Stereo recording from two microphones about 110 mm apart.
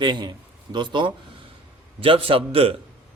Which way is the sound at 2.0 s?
55° right (ahead or behind).